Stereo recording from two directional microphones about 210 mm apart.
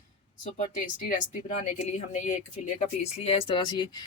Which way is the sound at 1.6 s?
35° left (ahead or behind).